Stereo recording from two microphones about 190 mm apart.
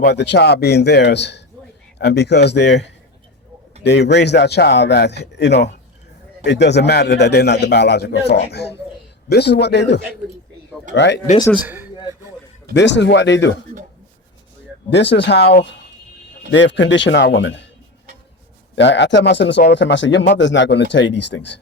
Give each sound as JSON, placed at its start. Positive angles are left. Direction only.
{"t": 0.0, "sound": "a man's voice", "side_deg": 65}
{"t": 11.5, "sound": "a man's voice", "side_deg": -10}
{"t": 12.7, "sound": "speech", "side_deg": 65}
{"t": 14.8, "sound": "a man's voice", "side_deg": 65}
{"t": 18.8, "sound": "speech", "side_deg": 65}